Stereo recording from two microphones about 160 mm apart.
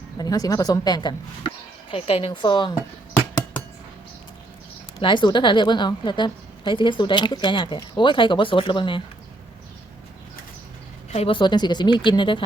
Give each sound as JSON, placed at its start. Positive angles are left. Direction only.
{"t": 0.2, "sound": "a woman's voice", "side_deg": 25}
{"t": 1.9, "sound": "a woman's voice", "side_deg": 35}
{"t": 4.9, "sound": "a woman's voice", "side_deg": 30}
{"t": 11.1, "sound": "a woman's voice", "side_deg": 35}